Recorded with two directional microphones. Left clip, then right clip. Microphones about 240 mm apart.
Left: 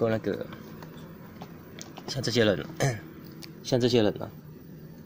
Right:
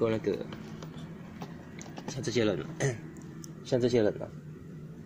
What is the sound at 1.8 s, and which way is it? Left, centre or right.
Speech, left.